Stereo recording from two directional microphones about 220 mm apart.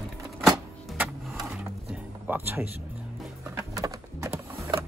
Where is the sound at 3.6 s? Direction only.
15° right (ahead or behind).